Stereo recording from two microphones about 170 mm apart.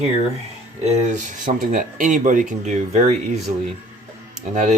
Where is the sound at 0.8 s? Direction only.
40° right (ahead or behind).